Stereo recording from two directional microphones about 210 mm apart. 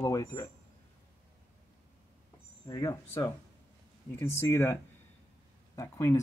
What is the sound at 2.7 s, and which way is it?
Speech, 15° left (ahead or behind).